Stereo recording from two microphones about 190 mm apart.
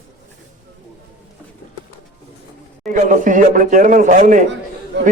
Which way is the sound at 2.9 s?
45° right (ahead or behind).